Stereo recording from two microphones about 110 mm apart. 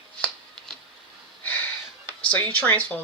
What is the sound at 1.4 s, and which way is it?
Gasp, 15° left (ahead or behind).